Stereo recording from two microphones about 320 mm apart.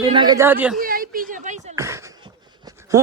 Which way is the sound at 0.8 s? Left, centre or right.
Right.